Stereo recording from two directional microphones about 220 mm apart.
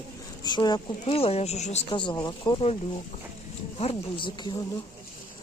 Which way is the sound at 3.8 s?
25° left (ahead or behind).